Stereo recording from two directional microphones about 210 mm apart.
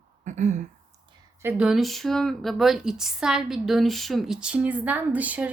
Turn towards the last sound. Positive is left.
turn(degrees=-5)  # may be behind; listen again after turning